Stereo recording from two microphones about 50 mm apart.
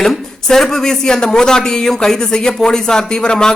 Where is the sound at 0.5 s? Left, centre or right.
Centre.